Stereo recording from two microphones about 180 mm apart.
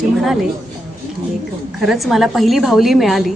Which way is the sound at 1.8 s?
Centre (ahead or behind).